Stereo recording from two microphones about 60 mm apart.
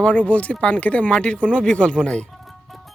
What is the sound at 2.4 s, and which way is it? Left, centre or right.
Music, centre.